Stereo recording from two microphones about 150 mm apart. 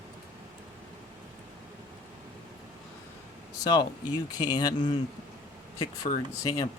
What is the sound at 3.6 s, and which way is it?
Speech, 30° left (ahead or behind).